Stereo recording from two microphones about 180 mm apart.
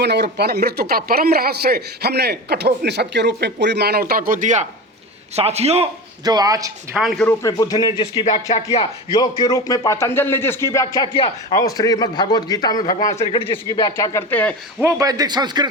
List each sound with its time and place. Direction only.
0.0 s a man's voice: 70° right (ahead or behind); by 5.9 s 35° right (ahead or behind)
6.2 s speech: 20° right (ahead or behind)
6.9 s speech: centre (ahead or behind)
7.3 s speech: 20° left (ahead or behind)
8.3 s speech: 40° left (ahead or behind)
9.1 s speech: 25° left (ahead or behind)
14.8 s speech: 15° right (ahead or behind)